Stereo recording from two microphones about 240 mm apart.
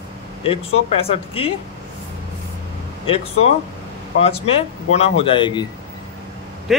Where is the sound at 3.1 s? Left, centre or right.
Left.